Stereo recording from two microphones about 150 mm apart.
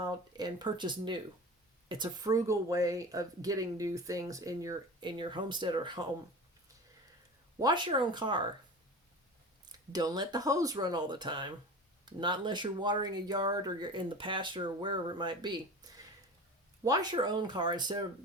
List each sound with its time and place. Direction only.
0.0 s speech: 30° right (ahead or behind)
7.6 s speech: 30° right (ahead or behind)
9.6 s speech: 25° right (ahead or behind)